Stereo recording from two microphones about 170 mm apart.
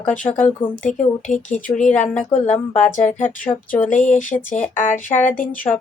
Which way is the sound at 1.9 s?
10° left (ahead or behind).